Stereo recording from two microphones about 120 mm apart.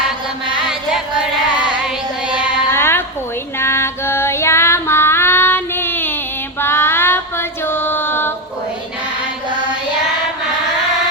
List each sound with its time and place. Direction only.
2.6 s music: 20° left (ahead or behind)
3.6 s female singing: 20° left (ahead or behind)